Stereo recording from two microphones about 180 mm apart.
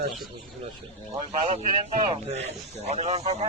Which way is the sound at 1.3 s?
40° right (ahead or behind).